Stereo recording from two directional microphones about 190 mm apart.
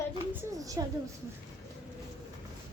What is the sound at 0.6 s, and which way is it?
Speech, 20° right (ahead or behind).